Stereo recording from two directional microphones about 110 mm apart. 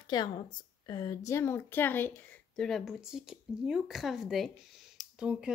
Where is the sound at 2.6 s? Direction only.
Centre (ahead or behind).